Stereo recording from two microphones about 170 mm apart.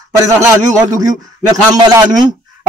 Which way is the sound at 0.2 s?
15° right (ahead or behind).